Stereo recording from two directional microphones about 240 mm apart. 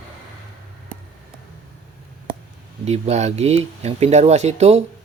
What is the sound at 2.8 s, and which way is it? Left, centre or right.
Speech, right.